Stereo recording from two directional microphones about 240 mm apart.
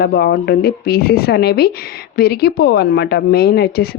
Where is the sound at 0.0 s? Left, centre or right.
Left.